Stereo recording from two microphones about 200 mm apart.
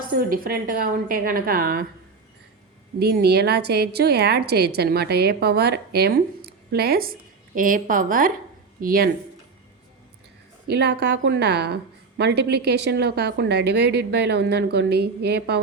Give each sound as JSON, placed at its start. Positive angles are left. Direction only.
{"t": 0.1, "sound": "a woman's voice", "side_deg": -45}
{"t": 3.0, "sound": "a woman's voice", "side_deg": -55}
{"t": 10.7, "sound": "a woman's voice", "side_deg": -55}